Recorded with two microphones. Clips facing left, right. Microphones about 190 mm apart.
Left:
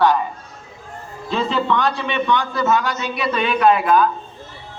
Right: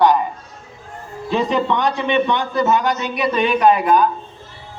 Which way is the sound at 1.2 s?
15° right (ahead or behind).